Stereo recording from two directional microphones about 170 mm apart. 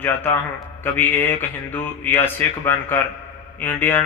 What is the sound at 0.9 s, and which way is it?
Speech, 10° left (ahead or behind).